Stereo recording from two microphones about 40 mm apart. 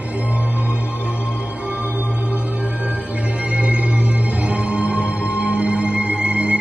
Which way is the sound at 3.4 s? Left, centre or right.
Right.